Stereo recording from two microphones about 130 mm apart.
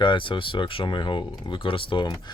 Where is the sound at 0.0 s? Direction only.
40° left (ahead or behind).